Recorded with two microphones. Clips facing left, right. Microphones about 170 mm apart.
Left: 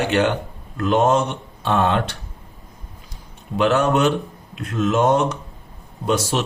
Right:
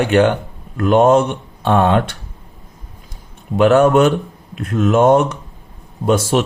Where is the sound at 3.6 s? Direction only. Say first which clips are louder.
Right 6 dB; 50° right (ahead or behind).